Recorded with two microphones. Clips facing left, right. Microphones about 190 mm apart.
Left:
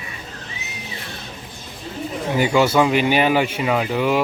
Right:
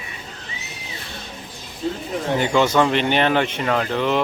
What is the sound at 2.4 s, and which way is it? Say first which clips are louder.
Speech: left 2 dB; 10° left (ahead or behind).